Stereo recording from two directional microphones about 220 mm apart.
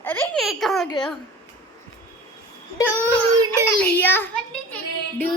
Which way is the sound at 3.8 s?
10° left (ahead or behind).